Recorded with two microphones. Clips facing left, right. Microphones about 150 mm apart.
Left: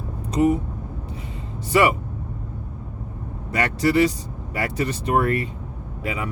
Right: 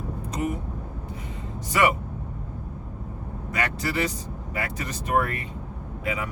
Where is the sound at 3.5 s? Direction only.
35° left (ahead or behind).